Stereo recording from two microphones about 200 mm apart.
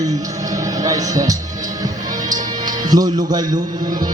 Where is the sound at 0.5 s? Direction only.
20° right (ahead or behind).